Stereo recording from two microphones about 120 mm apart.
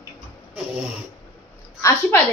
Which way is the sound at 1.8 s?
20° left (ahead or behind).